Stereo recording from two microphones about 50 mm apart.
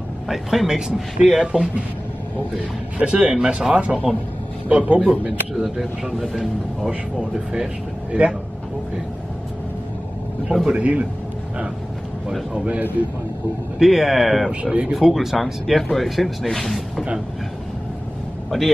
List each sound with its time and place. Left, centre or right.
0.3 s a man's voice: centre
3.0 s speech: right
5.6 s speech: centre
7.2 s a man's voice: centre
10.7 s speech: right
12.5 s speech: right
13.7 s speech: centre
14.5 s speech: right
15.0 s speech: centre
18.5 s speech: centre